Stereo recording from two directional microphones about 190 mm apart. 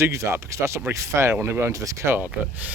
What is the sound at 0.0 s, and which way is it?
Speech, 15° right (ahead or behind).